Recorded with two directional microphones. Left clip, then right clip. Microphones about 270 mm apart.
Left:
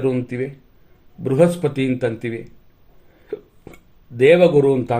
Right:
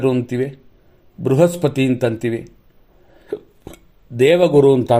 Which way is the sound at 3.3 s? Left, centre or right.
Right.